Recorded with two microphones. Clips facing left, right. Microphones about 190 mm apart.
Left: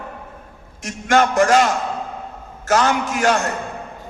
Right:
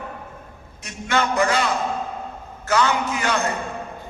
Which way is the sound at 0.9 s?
45° left (ahead or behind).